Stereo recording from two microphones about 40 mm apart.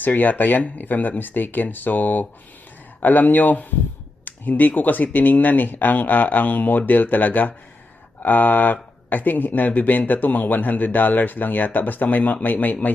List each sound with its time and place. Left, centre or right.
0.0 s speech: left